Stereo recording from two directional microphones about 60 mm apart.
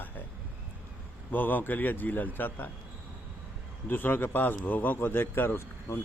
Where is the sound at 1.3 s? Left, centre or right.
Left.